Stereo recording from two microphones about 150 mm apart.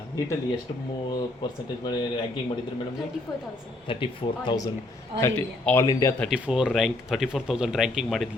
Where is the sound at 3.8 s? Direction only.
35° left (ahead or behind).